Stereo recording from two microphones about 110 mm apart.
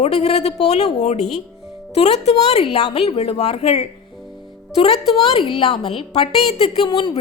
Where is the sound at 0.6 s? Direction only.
80° left.